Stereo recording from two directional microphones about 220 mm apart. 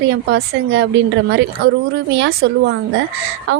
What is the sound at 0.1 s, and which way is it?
A woman's voice, 50° right (ahead or behind).